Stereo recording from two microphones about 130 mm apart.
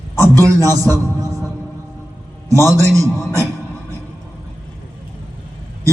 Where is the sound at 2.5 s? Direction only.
20° left (ahead or behind).